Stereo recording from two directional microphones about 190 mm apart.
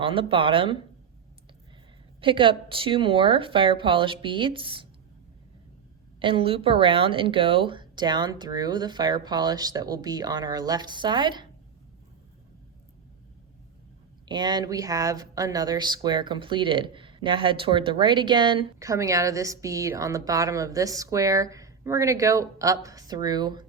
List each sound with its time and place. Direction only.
0.0 s speech: 25° right (ahead or behind)
2.2 s speech: 25° right (ahead or behind)
6.1 s speech: 25° right (ahead or behind)
14.3 s speech: 20° right (ahead or behind)